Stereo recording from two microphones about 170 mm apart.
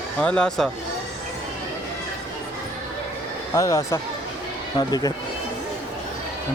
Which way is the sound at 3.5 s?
20° left (ahead or behind).